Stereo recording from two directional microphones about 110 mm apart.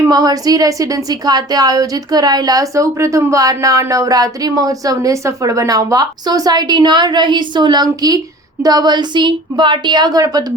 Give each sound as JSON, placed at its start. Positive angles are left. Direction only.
{"t": 0.1, "sound": "a woman's voice", "side_deg": -35}